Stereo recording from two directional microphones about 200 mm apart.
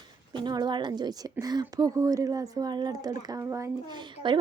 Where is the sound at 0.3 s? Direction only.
20° right (ahead or behind).